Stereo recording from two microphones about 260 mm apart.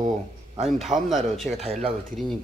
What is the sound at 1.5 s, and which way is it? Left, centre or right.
Speech, right.